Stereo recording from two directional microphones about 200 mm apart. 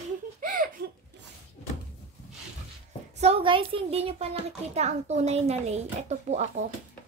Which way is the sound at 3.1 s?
30° right (ahead or behind).